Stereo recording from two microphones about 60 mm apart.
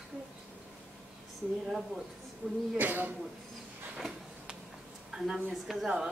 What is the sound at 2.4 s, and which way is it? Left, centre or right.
Speech, centre.